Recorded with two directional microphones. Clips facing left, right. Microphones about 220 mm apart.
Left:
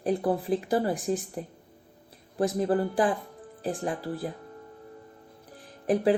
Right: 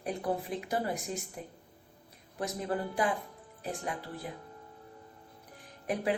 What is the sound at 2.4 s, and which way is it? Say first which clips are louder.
Speech: left 9 dB; 30° left (ahead or behind).